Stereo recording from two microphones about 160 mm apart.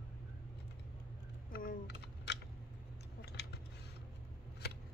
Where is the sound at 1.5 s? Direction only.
65° left (ahead or behind).